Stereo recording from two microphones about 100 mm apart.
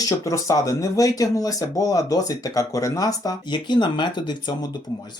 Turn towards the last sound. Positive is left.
turn(degrees=50)  # may be behind; listen again after turning